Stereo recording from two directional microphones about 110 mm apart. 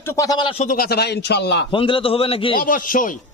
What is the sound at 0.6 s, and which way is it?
Speech, 90° left.